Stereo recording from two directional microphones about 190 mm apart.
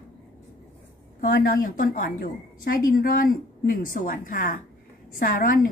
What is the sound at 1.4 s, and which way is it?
A woman's voice, 50° left (ahead or behind).